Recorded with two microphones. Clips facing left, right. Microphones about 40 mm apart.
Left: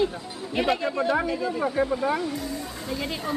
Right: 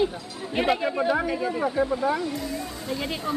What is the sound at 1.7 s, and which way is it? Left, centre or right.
Speech, centre.